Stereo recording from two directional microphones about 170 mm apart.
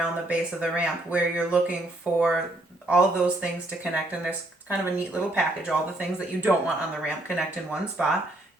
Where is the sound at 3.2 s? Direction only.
10° right (ahead or behind).